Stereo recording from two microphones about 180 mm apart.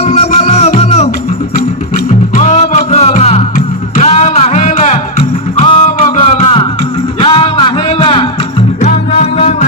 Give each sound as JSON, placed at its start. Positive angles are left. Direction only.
{"t": 0.0, "sound": "music", "side_deg": 35}
{"t": 8.8, "sound": "music", "side_deg": 40}